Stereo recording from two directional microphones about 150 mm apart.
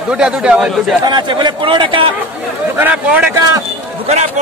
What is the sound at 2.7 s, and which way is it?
Speech, 10° right (ahead or behind).